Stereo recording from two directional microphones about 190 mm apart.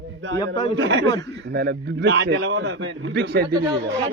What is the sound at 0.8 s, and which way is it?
Speech, 80° right.